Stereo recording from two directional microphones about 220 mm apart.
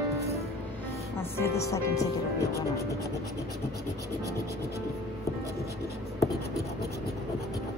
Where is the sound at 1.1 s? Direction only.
10° left (ahead or behind).